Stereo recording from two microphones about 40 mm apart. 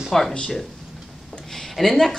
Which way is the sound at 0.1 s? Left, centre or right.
Centre.